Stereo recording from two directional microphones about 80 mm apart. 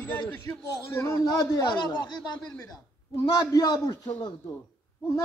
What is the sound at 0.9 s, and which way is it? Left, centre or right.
Speech, left.